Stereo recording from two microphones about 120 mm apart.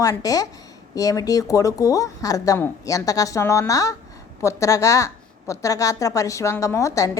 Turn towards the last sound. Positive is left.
turn(degrees=25)  # may be behind; listen again after turning